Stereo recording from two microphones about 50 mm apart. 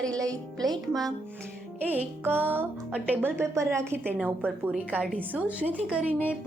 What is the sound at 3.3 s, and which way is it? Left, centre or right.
Speech, right.